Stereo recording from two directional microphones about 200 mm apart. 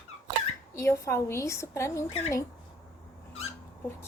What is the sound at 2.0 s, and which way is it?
Speech, 30° left (ahead or behind).